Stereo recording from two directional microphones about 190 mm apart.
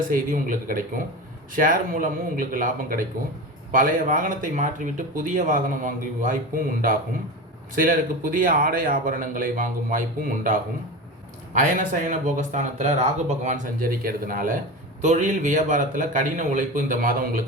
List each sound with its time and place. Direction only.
0.1 s speech: 45° right (ahead or behind)